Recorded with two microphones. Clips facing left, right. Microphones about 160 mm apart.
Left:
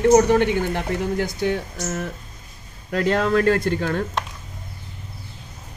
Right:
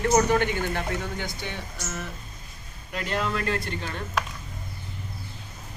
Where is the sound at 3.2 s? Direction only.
50° left (ahead or behind).